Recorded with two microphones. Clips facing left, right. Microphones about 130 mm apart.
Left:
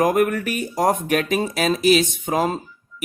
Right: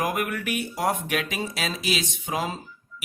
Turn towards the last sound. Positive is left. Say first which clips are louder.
# left 10 dB
turn(degrees=45)  # may be behind; listen again after turning